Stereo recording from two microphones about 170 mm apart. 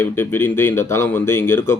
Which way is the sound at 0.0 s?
15° left (ahead or behind).